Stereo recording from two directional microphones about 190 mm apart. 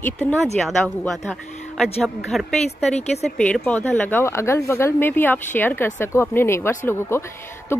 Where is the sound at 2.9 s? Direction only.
35° left (ahead or behind).